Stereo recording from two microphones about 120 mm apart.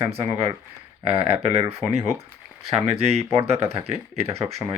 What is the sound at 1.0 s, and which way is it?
Speech, 55° right (ahead or behind).